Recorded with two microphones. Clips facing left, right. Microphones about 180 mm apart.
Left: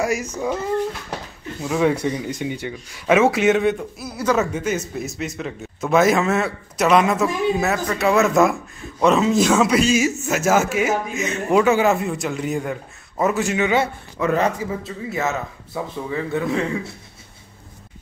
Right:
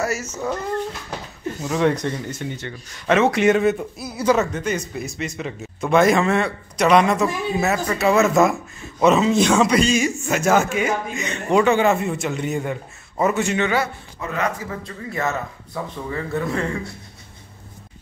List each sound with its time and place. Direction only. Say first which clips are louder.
0.0 s a man's voice: left 2 dB; 15° left (ahead or behind); by 4.4 s 5° right (ahead or behind)
4.4 s a man's voice: left 1 dB; 5° left (ahead or behind)
14.2 s speech: left 10 dB; 90° left
14.7 s a man's voice: left 3 dB; 5° left (ahead or behind)